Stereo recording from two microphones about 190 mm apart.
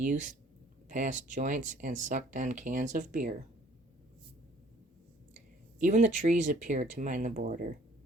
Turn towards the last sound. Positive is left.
turn(degrees=-40)  # may be behind; listen again after turning